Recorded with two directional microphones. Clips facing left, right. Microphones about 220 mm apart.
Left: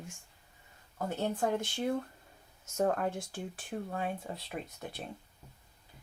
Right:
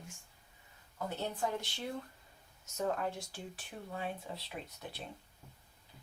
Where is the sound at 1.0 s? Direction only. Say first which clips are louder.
Left 5 dB; 50° left (ahead or behind).